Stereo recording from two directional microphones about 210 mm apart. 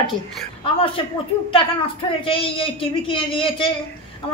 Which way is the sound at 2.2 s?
25° left (ahead or behind).